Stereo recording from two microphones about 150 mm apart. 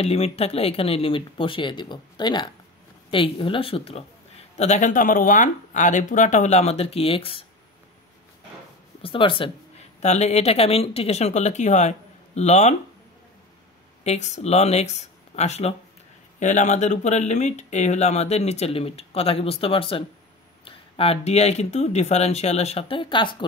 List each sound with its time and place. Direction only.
0.0 s speech: 40° left (ahead or behind)
4.6 s speech: 50° left (ahead or behind)
9.0 s speech: 35° left (ahead or behind)
14.0 s speech: 50° left (ahead or behind)